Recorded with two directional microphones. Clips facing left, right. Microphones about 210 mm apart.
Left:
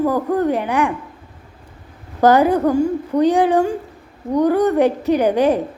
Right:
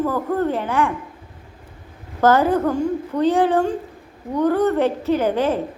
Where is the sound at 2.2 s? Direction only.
15° left (ahead or behind).